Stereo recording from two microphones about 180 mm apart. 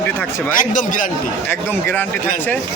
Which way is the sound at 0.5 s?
45° left (ahead or behind).